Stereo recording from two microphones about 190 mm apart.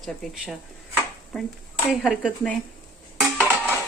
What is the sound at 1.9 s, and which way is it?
Speech, 5° right (ahead or behind).